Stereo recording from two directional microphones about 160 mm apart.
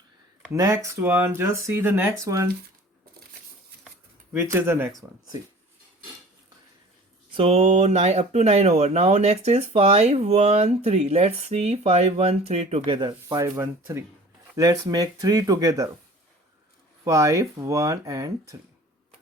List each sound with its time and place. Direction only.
0.5 s speech: 20° right (ahead or behind)
4.3 s speech: 15° right (ahead or behind)
7.3 s speech: 40° right (ahead or behind)
13.0 s speech: 25° right (ahead or behind)
17.0 s speech: 20° right (ahead or behind)